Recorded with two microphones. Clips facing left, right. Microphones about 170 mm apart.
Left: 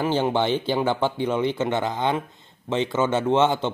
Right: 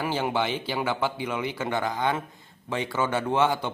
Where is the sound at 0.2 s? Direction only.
30° left (ahead or behind).